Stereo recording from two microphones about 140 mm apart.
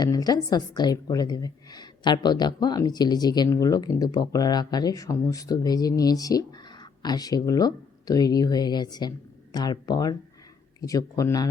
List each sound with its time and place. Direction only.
0.0 s a woman's voice: 25° left (ahead or behind)